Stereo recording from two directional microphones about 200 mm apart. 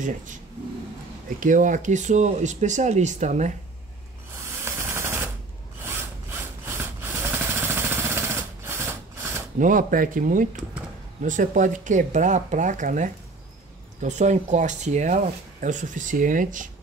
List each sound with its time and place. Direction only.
1.4 s speech: 40° right (ahead or behind)
4.6 s a sound: 10° right (ahead or behind)
6.6 s jackhammer: 10° right (ahead or behind)
9.6 s speech: 40° right (ahead or behind)